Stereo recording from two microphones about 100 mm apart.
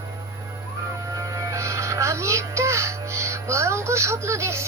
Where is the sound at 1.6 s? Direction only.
30° right (ahead or behind).